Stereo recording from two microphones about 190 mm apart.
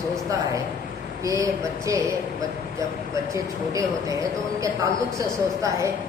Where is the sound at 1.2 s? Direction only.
15° right (ahead or behind).